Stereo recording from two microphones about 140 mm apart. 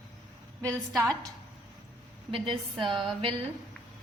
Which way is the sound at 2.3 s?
40° right (ahead or behind).